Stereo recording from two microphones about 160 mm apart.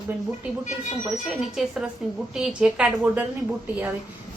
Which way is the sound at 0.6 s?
45° left (ahead or behind).